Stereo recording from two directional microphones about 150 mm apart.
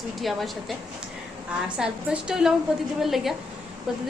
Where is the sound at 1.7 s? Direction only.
5° right (ahead or behind).